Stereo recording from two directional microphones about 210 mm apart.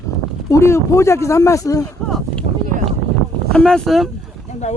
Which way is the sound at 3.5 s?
5° left (ahead or behind).